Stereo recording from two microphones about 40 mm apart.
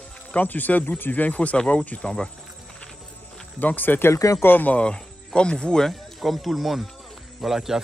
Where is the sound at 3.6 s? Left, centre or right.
Left.